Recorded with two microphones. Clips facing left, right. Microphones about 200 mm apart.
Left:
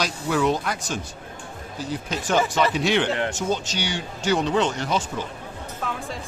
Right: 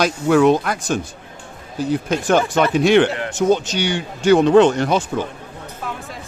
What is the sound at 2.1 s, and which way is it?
Speech, 55° right (ahead or behind).